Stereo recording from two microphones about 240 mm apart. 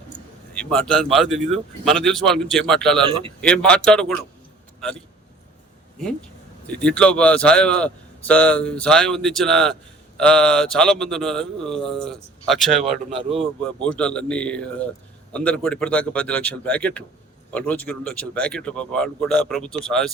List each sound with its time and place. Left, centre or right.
0.5 s a man's voice: centre
3.0 s speech: right
3.4 s a man's voice: centre
6.7 s a man's voice: centre